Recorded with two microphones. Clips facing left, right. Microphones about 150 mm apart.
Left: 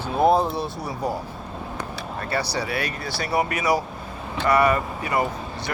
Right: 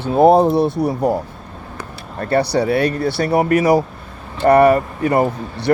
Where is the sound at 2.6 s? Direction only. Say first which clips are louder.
Right 11 dB; 30° right (ahead or behind).